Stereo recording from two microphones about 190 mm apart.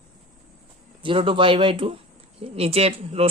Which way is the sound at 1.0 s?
25° right (ahead or behind).